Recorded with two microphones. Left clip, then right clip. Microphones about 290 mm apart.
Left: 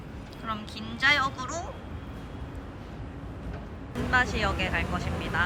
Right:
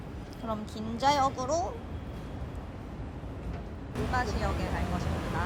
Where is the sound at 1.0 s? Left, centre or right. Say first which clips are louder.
Left 2 dB; centre.